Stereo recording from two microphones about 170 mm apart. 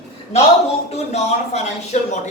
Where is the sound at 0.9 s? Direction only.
40° left (ahead or behind).